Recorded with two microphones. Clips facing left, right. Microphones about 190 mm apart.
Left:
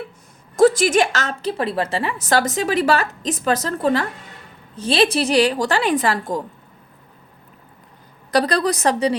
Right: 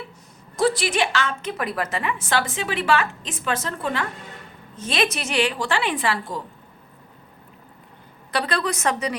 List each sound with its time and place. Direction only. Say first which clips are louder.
0.5 s a woman's voice: left 7 dB; 45° left (ahead or behind)
8.3 s a woman's voice: left 6 dB; 40° left (ahead or behind)